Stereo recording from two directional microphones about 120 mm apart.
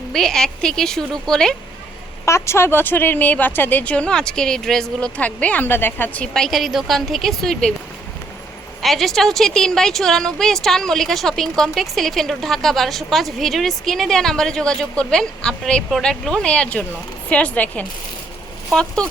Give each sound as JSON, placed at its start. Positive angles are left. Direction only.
{"t": 0.1, "sound": "a woman's voice", "side_deg": 5}
{"t": 2.2, "sound": "speech", "side_deg": 20}
{"t": 6.3, "sound": "a woman's voice", "side_deg": 0}
{"t": 8.8, "sound": "a woman's voice", "side_deg": 0}